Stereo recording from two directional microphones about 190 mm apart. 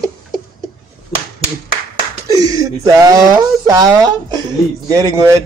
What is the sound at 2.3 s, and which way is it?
A man's voice, 20° right (ahead or behind).